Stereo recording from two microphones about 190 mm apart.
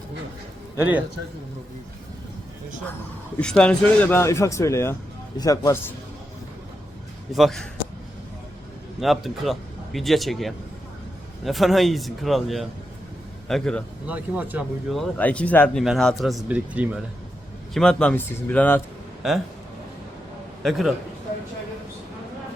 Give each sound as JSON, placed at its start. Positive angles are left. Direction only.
{"t": 0.8, "sound": "speech", "side_deg": -10}
{"t": 3.4, "sound": "speech", "side_deg": 5}
{"t": 7.3, "sound": "speech", "side_deg": 0}
{"t": 9.0, "sound": "speech", "side_deg": 0}
{"t": 14.1, "sound": "speech", "side_deg": -10}
{"t": 14.9, "sound": "speech", "side_deg": 5}
{"t": 17.7, "sound": "speech", "side_deg": 5}
{"t": 19.2, "sound": "speech", "side_deg": 0}
{"t": 20.6, "sound": "a man's voice", "side_deg": 0}